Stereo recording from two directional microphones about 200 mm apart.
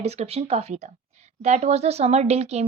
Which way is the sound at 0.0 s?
30° right (ahead or behind).